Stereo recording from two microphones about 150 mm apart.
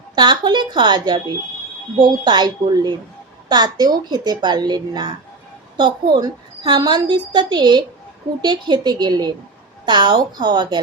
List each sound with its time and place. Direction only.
0.2 s a woman's voice: 30° right (ahead or behind)